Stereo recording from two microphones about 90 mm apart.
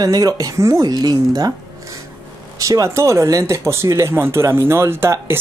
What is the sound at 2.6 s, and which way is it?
Speech, 35° right (ahead or behind).